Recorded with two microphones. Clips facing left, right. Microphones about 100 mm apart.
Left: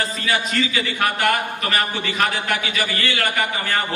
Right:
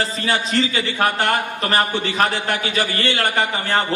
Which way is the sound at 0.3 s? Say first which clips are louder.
Right 2 dB; 30° right (ahead or behind).